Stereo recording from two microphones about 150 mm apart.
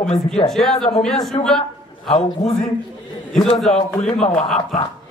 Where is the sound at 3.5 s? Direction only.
Centre (ahead or behind).